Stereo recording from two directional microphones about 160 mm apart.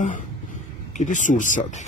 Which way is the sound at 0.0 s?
50° left (ahead or behind).